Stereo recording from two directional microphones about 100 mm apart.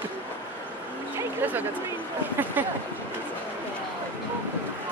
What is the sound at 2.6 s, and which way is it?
Speech, 20° right (ahead or behind).